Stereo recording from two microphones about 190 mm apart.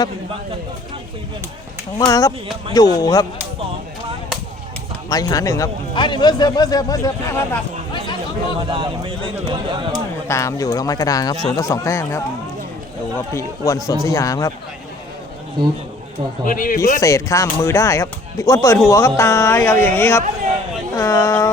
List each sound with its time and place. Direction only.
2.0 s speech: 20° left (ahead or behind)
5.0 s speech: 20° left (ahead or behind)
7.9 s chatter: 25° left (ahead or behind)
8.7 s speech: 25° right (ahead or behind)
10.2 s speech: 15° left (ahead or behind)
16.5 s speech: 45° left (ahead or behind)
17.0 s speech: 15° left (ahead or behind)